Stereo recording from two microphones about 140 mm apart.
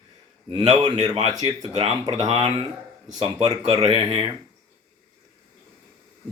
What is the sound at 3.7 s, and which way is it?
Speech, 30° right (ahead or behind).